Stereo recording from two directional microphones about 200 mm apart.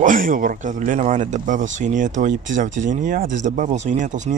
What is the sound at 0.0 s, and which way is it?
Speech, 45° right (ahead or behind).